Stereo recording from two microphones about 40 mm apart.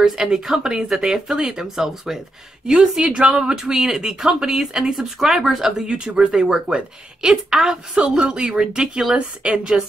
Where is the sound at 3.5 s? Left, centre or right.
Centre.